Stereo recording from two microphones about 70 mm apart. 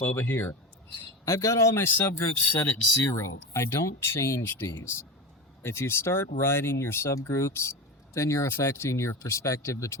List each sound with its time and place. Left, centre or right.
0.0 s speech: left
1.2 s speech: left
1.8 s speech: left
3.0 s speech: left